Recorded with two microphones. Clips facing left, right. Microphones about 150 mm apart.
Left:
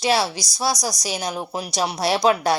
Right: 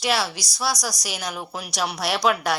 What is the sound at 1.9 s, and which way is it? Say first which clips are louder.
Speech: left 4 dB; 40° left (ahead or behind).